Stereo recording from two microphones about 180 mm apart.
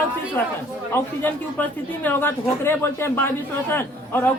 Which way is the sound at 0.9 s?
10° left (ahead or behind).